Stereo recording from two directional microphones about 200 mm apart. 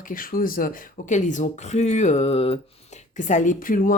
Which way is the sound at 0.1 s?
45° left (ahead or behind).